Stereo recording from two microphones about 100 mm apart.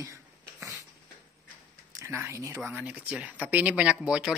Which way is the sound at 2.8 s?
15° right (ahead or behind).